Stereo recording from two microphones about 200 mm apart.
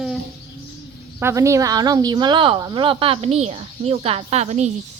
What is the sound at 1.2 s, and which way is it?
A woman's voice, 15° right (ahead or behind).